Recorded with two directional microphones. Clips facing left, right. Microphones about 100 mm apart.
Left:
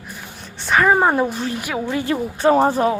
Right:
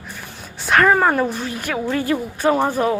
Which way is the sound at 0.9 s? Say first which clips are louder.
Even; 20° left (ahead or behind).